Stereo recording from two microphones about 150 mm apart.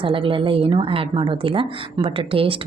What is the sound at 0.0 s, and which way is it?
Speech, 35° right (ahead or behind).